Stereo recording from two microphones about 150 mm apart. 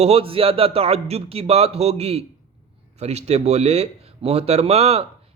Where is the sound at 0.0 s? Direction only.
40° right (ahead or behind).